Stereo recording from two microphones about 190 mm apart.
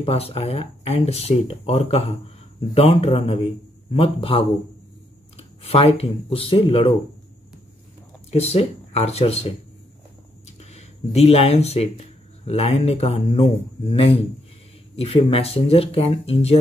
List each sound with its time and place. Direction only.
0.0 s speech: 30° left (ahead or behind)
5.6 s speech: 30° left (ahead or behind)
8.3 s speech: 35° left (ahead or behind)
10.6 s speech: 35° left (ahead or behind)